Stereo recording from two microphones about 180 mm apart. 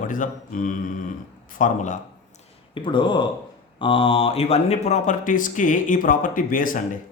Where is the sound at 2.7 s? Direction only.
25° left (ahead or behind).